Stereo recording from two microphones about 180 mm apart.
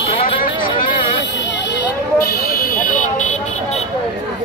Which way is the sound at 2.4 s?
55° left (ahead or behind).